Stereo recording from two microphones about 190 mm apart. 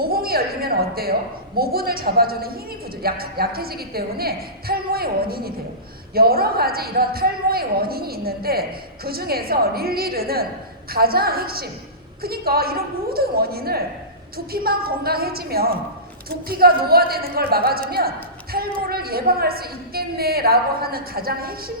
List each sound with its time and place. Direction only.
0.0 s a woman's voice: 50° right (ahead or behind)
18.5 s a sound: 55° right (ahead or behind)
18.9 s a woman's voice: 55° right (ahead or behind)